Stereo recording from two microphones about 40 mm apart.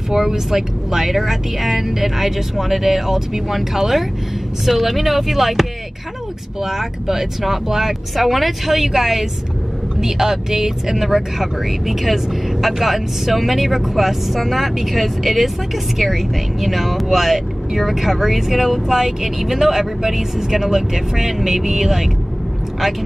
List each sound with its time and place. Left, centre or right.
0.1 s speech: centre